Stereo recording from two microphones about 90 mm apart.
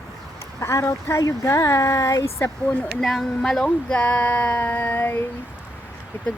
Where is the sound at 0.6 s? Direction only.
35° left (ahead or behind).